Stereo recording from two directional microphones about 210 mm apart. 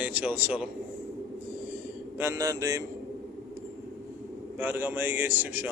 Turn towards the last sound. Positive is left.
turn(degrees=-10)  # may be behind; listen again after turning